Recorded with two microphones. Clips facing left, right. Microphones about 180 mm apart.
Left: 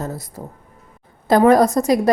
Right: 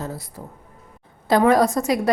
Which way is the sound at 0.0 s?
45° left (ahead or behind).